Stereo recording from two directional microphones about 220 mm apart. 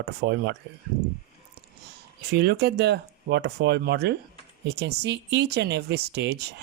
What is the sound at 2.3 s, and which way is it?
Speech, 50° right (ahead or behind).